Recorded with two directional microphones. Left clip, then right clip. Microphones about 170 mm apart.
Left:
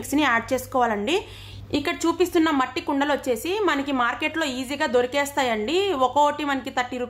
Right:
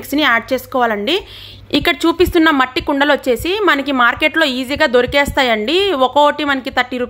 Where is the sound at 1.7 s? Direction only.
35° right (ahead or behind).